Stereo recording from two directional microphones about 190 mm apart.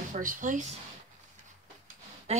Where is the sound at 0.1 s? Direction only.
45° right (ahead or behind).